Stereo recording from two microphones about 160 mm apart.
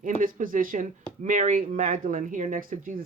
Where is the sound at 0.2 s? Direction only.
55° right (ahead or behind).